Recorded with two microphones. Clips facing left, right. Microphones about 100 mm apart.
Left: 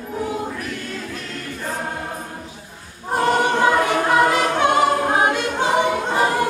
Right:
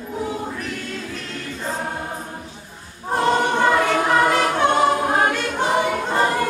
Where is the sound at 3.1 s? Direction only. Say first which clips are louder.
Left 1 dB; 10° left (ahead or behind).